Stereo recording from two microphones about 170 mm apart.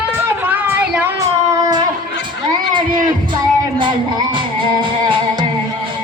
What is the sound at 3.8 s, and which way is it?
Music, 30° right (ahead or behind).